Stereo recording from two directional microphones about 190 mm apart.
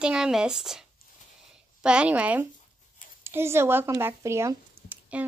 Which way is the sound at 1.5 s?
5° right (ahead or behind).